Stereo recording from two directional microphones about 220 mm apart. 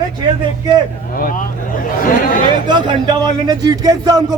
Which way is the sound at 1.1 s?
40° left (ahead or behind).